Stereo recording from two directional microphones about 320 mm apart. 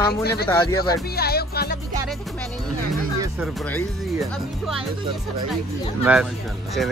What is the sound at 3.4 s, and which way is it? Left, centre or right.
Speech, centre.